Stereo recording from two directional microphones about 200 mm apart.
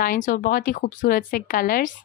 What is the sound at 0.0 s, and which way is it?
Speech, 40° left (ahead or behind).